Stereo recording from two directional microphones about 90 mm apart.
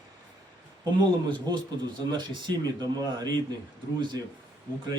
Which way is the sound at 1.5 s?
55° right (ahead or behind).